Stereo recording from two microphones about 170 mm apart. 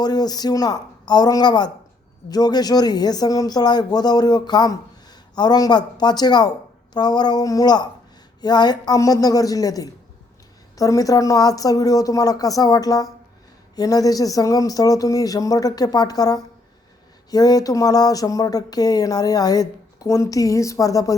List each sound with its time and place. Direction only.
0.0 s speech: 25° left (ahead or behind)